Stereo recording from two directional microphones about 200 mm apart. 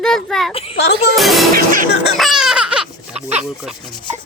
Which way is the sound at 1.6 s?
45° right (ahead or behind).